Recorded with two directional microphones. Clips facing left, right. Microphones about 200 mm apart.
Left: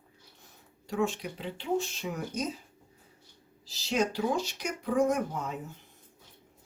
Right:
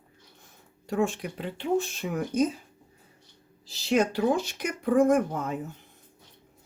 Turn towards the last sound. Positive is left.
turn(degrees=-50)  # may be behind; listen again after turning